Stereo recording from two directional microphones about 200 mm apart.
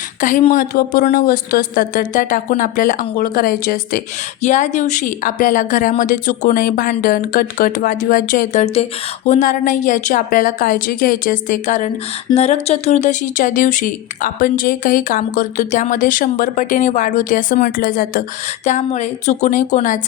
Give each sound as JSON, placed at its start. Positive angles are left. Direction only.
{"t": 0.2, "sound": "speech", "side_deg": 40}
{"t": 18.6, "sound": "speech", "side_deg": 35}